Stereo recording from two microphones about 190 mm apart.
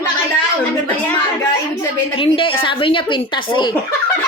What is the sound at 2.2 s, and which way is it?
Speech, 30° left (ahead or behind).